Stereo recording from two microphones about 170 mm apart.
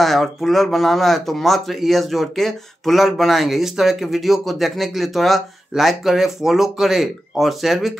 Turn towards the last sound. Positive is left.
turn(degrees=0)  # may be behind; listen again after turning